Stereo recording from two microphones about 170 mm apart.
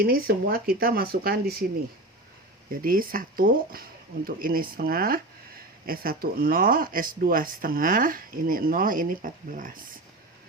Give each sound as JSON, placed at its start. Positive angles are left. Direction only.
{"t": 0.0, "sound": "speech", "side_deg": -60}
{"t": 2.8, "sound": "speech", "side_deg": -55}